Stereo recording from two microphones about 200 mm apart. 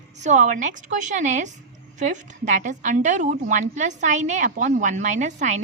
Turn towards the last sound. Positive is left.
turn(degrees=-35)  # may be behind; listen again after turning